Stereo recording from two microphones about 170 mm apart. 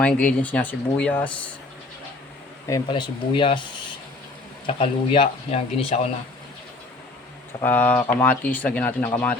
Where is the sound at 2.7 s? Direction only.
25° left (ahead or behind).